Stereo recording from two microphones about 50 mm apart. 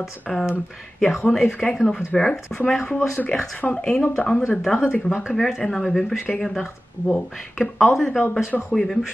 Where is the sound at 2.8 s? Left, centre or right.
Left.